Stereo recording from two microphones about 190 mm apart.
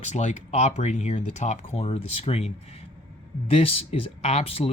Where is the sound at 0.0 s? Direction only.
40° left (ahead or behind).